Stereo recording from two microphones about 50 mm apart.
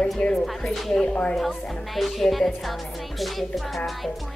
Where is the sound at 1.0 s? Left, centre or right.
Left.